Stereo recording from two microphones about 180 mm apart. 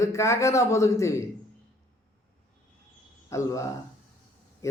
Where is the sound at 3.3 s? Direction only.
15° left (ahead or behind).